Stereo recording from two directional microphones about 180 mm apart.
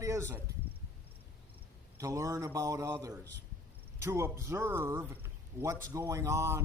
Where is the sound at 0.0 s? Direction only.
15° right (ahead or behind).